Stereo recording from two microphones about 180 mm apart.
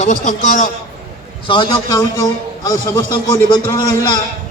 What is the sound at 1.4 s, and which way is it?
Speech, 25° left (ahead or behind).